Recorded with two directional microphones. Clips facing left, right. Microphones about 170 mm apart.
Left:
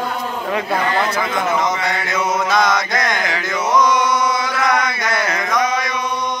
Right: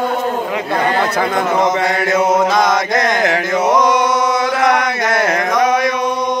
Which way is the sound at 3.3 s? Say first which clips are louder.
Right 5 dB; 55° right (ahead or behind).